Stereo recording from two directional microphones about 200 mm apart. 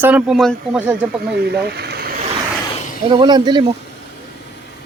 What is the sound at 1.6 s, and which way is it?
Vehicle, 55° right (ahead or behind).